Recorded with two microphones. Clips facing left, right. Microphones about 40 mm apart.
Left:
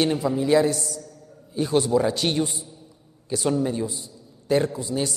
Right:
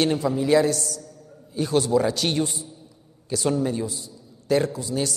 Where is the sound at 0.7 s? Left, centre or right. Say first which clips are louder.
Even; centre.